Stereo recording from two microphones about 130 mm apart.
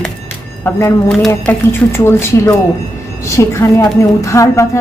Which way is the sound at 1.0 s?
5° left (ahead or behind).